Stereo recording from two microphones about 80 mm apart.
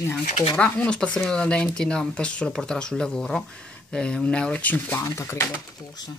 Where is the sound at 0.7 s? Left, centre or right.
Centre.